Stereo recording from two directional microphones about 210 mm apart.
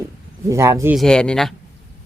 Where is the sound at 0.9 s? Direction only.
5° left (ahead or behind).